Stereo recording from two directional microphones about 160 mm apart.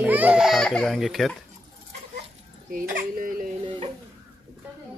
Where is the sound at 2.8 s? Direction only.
60° right (ahead or behind).